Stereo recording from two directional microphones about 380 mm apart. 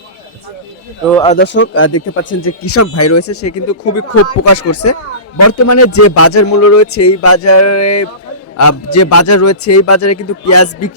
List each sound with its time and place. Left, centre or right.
1.1 s speech: centre
1.4 s speech: left